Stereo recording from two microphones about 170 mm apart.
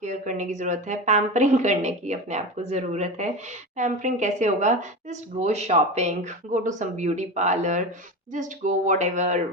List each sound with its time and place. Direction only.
0.0 s speech: 45° right (ahead or behind)